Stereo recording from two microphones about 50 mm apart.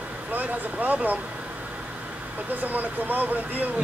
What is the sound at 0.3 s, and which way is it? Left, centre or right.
Speech, right.